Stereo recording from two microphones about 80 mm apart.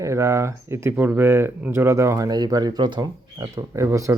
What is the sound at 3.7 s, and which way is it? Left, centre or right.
Speech, right.